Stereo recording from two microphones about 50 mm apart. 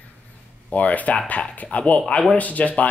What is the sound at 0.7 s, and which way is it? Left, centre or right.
Speech, left.